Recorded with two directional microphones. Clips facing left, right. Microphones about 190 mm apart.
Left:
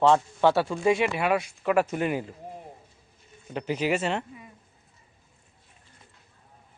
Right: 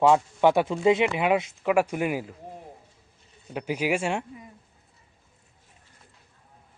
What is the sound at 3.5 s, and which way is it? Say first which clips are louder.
Speech: even; 10° right (ahead or behind).